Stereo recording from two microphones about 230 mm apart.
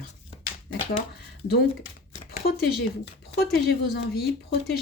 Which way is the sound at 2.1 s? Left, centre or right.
Left.